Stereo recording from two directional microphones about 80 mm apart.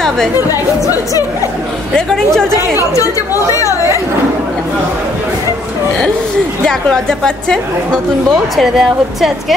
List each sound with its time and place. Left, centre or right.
0.5 s speech: left
2.0 s a woman's voice: centre
6.6 s a woman's voice: centre